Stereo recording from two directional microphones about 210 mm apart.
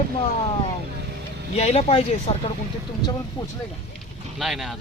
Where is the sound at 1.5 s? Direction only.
30° left (ahead or behind).